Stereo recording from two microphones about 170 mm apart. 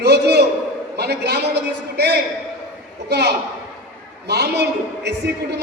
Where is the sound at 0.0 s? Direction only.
75° right (ahead or behind).